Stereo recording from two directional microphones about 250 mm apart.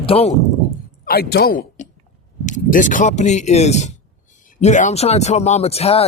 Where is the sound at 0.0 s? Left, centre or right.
Left.